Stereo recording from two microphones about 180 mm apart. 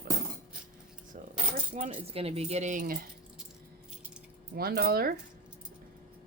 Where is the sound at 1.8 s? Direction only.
35° right (ahead or behind).